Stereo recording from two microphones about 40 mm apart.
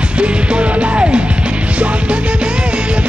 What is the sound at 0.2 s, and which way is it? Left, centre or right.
Music, right.